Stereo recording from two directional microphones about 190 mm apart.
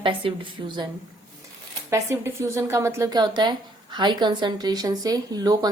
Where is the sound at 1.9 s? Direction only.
15° right (ahead or behind).